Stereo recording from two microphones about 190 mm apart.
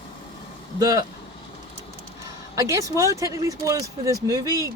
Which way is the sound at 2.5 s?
15° right (ahead or behind).